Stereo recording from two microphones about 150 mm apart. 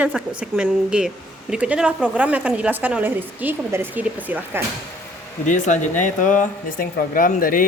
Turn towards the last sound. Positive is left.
turn(degrees=70)  # may be behind; listen again after turning